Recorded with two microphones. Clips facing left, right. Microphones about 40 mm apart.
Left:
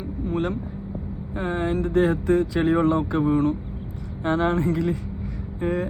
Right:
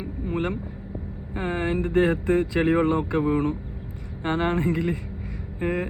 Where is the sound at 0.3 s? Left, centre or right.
Right.